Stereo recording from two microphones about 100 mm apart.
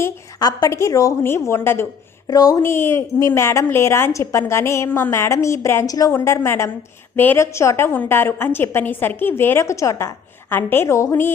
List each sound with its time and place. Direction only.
0.3 s a woman's voice: 40° left (ahead or behind)
0.7 s a woman's voice: 30° left (ahead or behind)
2.2 s speech: 40° left (ahead or behind)
2.6 s a woman's voice: 25° left (ahead or behind)
6.1 s a woman's voice: 25° left (ahead or behind)